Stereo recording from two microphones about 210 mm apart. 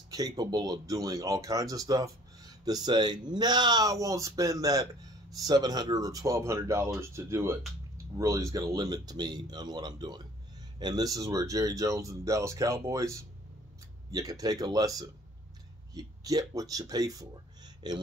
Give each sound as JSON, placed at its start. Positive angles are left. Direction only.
{"t": 0.1, "sound": "speech", "side_deg": -20}